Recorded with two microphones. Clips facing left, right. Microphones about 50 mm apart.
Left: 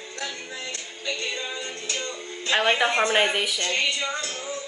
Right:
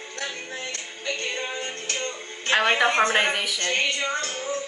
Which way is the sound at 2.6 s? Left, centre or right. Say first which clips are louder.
Right 1 dB; right.